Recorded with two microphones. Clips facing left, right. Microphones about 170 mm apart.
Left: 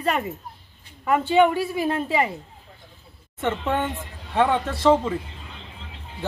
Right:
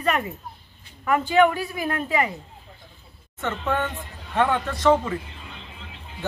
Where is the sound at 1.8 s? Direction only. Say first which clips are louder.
Left 1 dB; 30° left (ahead or behind).